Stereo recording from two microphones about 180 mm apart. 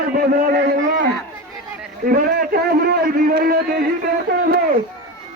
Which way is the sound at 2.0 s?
55° right (ahead or behind).